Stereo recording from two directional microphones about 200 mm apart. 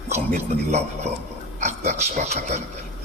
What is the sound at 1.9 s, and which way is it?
Speech, 35° right (ahead or behind).